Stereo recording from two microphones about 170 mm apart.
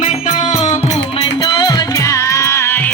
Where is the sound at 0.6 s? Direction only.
40° left (ahead or behind).